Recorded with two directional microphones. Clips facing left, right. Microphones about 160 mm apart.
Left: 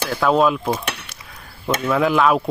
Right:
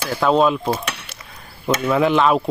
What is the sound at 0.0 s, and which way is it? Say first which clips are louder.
Speech: even; 5° right (ahead or behind).